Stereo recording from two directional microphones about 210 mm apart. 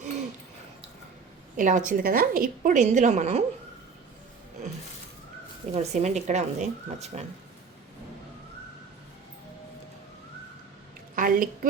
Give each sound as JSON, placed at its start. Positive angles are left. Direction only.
{"t": 1.5, "sound": "a woman's voice", "side_deg": -35}
{"t": 5.7, "sound": "a woman's voice", "side_deg": -35}
{"t": 11.1, "sound": "a woman's voice", "side_deg": -40}